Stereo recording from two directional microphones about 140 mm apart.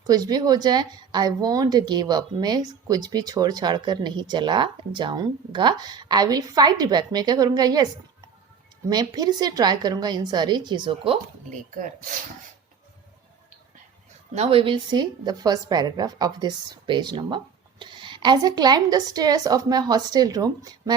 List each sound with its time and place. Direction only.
0.0 s a woman's voice: 25° right (ahead or behind)
8.9 s a woman's voice: 30° right (ahead or behind)
11.4 s speech: 70° right (ahead or behind)
14.3 s a woman's voice: 40° right (ahead or behind); by 20.9 s 25° right (ahead or behind)